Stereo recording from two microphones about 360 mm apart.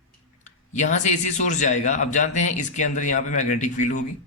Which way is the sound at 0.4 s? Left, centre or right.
Centre.